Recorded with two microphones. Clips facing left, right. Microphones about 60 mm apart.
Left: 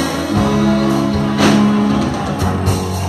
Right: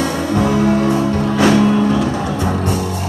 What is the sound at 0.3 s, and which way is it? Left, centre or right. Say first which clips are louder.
Music: even; left.